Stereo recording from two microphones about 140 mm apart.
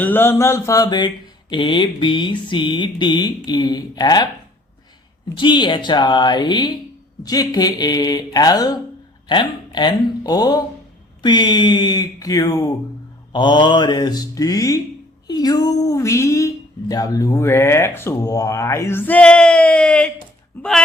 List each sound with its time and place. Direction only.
0.0 s speech: 15° left (ahead or behind)
5.4 s speech: 35° left (ahead or behind); by 20.8 s 5° left (ahead or behind)